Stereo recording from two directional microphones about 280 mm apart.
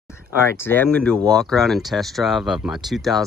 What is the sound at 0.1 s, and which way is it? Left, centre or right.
Speech, centre.